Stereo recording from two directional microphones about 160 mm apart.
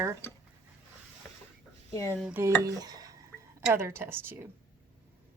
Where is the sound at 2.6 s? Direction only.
25° right (ahead or behind).